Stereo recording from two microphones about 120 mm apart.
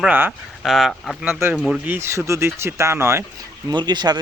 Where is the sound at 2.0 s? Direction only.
25° right (ahead or behind).